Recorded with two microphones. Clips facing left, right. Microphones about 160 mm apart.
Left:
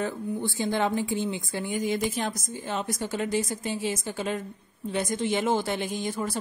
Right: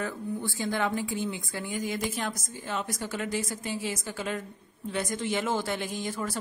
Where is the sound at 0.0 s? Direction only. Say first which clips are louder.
Left 3 dB; 25° left (ahead or behind).